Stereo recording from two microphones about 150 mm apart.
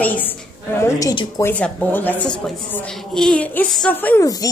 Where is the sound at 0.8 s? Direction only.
20° left (ahead or behind).